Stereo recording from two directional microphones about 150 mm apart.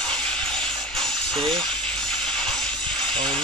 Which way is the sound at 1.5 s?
5° left (ahead or behind).